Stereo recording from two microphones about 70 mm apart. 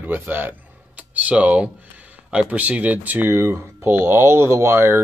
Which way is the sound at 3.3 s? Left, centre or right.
Right.